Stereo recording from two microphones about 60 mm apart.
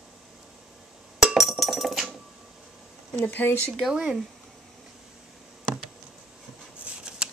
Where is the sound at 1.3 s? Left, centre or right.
Centre.